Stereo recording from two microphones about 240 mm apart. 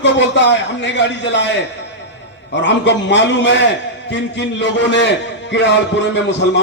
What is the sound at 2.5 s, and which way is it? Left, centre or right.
A man's voice, left.